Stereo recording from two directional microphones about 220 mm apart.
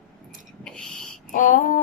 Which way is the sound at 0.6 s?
5° left (ahead or behind).